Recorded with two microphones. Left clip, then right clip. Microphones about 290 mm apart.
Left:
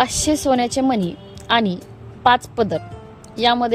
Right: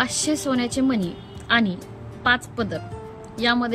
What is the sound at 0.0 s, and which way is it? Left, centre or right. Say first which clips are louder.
A woman's voice: left 5 dB; centre.